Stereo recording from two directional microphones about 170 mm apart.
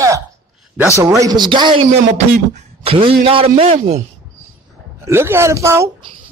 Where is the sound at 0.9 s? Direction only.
20° right (ahead or behind).